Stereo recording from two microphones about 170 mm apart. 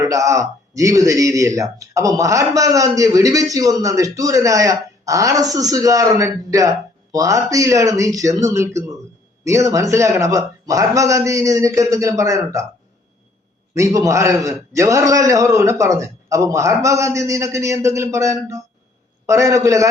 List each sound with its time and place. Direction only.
0.0 s speech: 20° right (ahead or behind)
13.7 s a man's voice: 20° right (ahead or behind)